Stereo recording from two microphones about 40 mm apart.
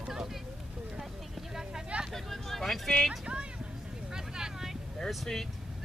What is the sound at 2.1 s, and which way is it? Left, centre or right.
Vehicle, centre.